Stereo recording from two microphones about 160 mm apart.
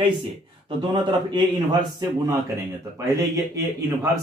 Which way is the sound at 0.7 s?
30° right (ahead or behind).